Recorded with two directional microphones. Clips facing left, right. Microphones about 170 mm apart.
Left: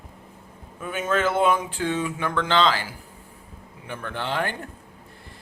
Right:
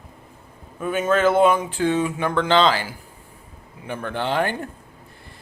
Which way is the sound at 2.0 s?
25° right (ahead or behind).